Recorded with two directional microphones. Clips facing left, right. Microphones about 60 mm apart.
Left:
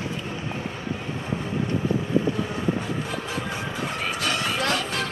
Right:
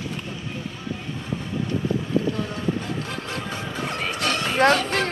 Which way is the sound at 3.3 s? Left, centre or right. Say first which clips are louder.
Even; centre.